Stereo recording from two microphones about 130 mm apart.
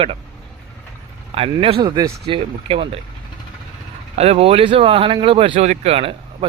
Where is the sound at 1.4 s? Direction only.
45° right (ahead or behind).